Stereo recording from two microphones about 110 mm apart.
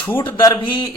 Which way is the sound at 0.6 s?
45° left (ahead or behind).